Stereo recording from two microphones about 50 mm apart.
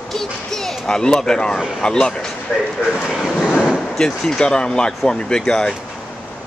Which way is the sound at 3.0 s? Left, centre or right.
Centre.